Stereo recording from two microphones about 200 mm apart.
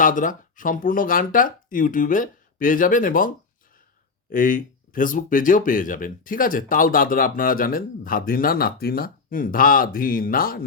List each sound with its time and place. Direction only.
0.0 s speech: 40° left (ahead or behind)